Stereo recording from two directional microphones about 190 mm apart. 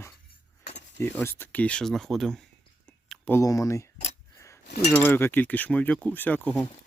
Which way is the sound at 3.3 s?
20° left (ahead or behind).